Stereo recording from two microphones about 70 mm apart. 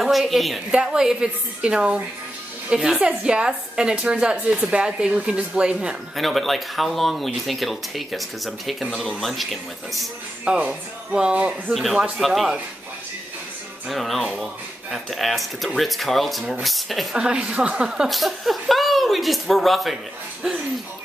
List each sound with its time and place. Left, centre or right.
0.0 s a woman's voice: centre
0.7 s a woman's voice: centre
6.1 s speech: centre
10.4 s a woman's voice: centre
11.7 s speech: centre
13.8 s speech: centre
17.2 s speech: centre